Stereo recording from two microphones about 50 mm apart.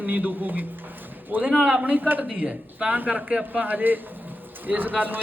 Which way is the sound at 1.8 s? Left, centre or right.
Right.